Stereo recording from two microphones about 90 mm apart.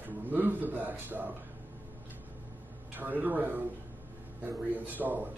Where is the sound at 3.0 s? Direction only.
20° right (ahead or behind).